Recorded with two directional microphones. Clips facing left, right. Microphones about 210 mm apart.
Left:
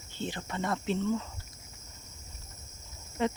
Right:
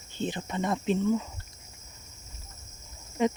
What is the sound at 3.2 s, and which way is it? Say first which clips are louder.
Speech: right 4 dB; 15° right (ahead or behind).